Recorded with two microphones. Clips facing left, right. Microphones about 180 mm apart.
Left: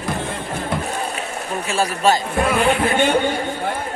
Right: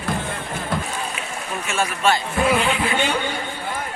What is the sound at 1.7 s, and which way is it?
Speech, 35° left (ahead or behind).